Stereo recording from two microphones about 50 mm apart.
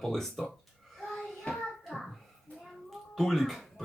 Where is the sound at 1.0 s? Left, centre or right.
Centre.